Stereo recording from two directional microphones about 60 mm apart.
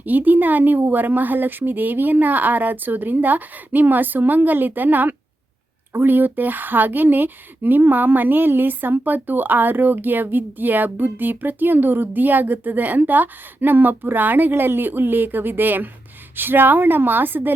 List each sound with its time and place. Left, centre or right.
0.0 s speech: right